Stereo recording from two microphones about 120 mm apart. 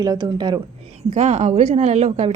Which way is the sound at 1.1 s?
65° right (ahead or behind).